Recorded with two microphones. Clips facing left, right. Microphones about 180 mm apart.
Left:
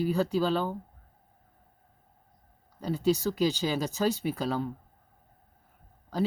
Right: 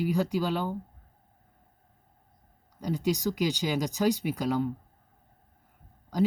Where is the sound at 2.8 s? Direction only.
15° right (ahead or behind).